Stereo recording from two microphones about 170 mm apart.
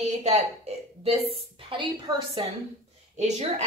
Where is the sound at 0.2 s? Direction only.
40° right (ahead or behind).